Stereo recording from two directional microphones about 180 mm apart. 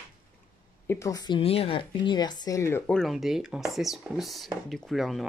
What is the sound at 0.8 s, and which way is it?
Speech, 15° left (ahead or behind).